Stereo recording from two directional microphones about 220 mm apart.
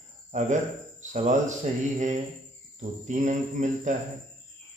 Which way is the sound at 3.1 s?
35° right (ahead or behind).